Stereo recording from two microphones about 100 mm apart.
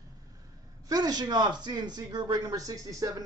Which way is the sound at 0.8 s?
40° right (ahead or behind).